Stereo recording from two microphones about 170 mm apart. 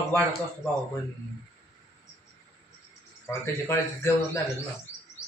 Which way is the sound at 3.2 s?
15° left (ahead or behind).